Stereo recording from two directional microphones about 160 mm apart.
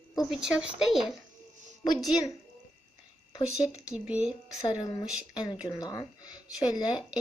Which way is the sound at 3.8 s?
5° right (ahead or behind).